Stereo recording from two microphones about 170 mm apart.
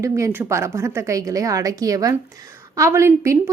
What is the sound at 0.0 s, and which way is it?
A woman's voice, 20° right (ahead or behind).